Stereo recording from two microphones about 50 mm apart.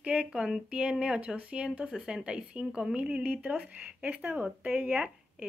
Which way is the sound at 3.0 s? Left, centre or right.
Right.